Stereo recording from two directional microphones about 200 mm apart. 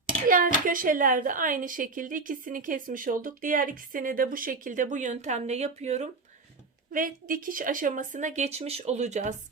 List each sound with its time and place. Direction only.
0.3 s a woman's voice: 45° right (ahead or behind)